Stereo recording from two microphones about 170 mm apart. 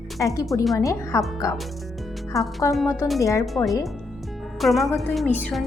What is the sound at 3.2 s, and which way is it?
Speech, 20° left (ahead or behind).